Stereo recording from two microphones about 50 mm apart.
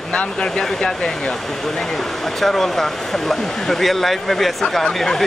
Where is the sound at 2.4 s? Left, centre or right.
Centre.